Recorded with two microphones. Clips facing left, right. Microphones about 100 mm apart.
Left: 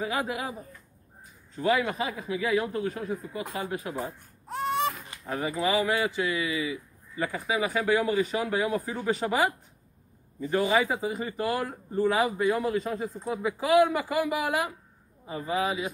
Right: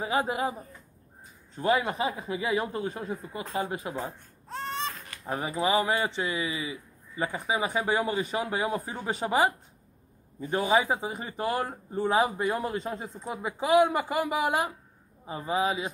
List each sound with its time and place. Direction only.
0.0 s a man's voice: 30° right (ahead or behind)
3.9 s baby cry: 15° left (ahead or behind)
5.2 s speech: 25° right (ahead or behind)
10.5 s speech: 20° right (ahead or behind)